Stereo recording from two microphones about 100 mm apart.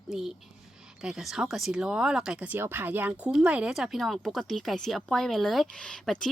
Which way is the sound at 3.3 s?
10° right (ahead or behind).